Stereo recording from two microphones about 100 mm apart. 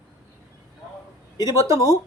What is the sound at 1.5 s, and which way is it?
Speech, 30° right (ahead or behind).